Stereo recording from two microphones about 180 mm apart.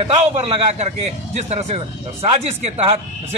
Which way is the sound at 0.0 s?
30° right (ahead or behind).